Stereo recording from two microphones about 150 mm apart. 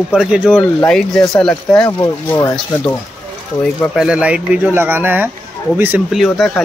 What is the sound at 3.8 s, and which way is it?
Speech, 5° right (ahead or behind).